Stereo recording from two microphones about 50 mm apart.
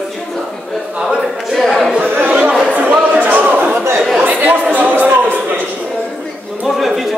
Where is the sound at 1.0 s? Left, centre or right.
Centre.